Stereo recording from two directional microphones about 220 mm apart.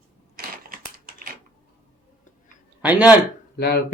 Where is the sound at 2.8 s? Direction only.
5° right (ahead or behind).